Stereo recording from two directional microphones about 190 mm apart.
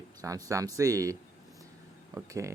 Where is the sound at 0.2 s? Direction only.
15° right (ahead or behind).